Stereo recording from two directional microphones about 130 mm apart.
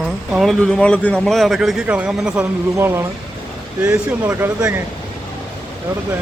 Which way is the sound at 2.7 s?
20° right (ahead or behind).